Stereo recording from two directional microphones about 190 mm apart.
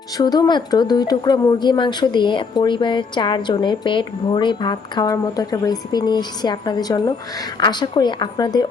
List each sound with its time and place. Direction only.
0.2 s speech: 20° left (ahead or behind)